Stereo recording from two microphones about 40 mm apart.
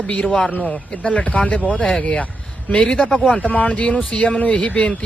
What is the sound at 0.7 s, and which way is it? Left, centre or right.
Speech, left.